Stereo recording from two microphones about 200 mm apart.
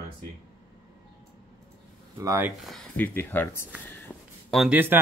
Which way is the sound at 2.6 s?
Centre (ahead or behind).